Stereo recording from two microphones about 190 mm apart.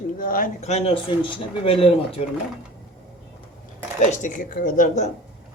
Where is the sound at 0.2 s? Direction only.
45° left (ahead or behind); by 2.2 s 30° left (ahead or behind).